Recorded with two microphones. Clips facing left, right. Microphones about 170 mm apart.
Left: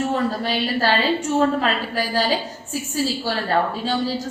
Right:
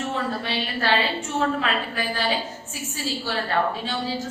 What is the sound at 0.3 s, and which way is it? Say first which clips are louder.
A woman's voice: left 5 dB; 40° left (ahead or behind).